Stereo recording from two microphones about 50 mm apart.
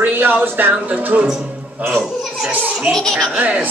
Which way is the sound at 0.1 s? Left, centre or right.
Right.